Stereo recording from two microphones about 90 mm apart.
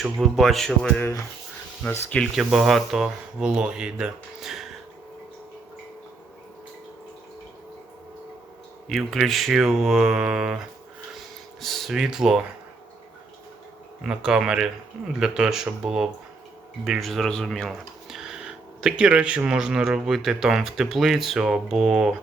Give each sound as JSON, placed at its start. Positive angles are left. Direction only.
{"t": 0.0, "sound": "speech", "side_deg": 0}
{"t": 2.3, "sound": "speech", "side_deg": -5}
{"t": 8.9, "sound": "speech", "side_deg": 0}
{"t": 11.6, "sound": "speech", "side_deg": 0}
{"t": 14.0, "sound": "speech", "side_deg": -5}
{"t": 18.2, "sound": "speech", "side_deg": -5}